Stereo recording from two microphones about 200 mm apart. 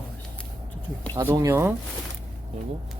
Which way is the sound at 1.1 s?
15° right (ahead or behind).